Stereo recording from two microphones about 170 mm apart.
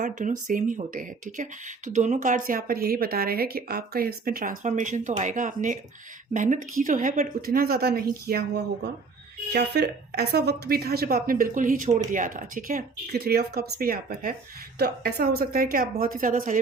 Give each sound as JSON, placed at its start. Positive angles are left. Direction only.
{"t": 0.0, "sound": "a woman's voice", "side_deg": -45}